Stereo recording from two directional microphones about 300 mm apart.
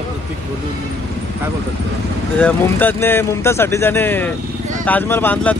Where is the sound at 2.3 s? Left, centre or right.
Centre.